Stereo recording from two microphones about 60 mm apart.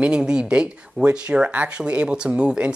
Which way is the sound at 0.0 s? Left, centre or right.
Centre.